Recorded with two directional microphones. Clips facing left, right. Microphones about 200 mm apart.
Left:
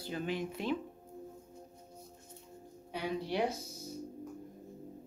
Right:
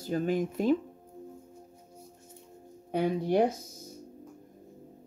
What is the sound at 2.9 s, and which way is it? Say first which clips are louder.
Speech: right 9 dB; 50° right (ahead or behind).